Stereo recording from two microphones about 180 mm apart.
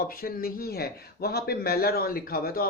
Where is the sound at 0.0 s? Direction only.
55° left (ahead or behind).